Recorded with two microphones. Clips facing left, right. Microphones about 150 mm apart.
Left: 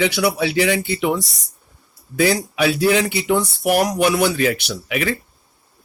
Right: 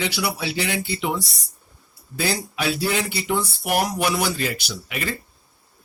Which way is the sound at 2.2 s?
75° left (ahead or behind).